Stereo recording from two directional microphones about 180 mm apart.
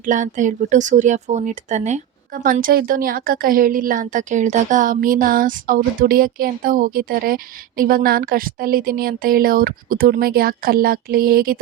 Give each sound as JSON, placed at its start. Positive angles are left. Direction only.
{"t": 0.0, "sound": "speech", "side_deg": -45}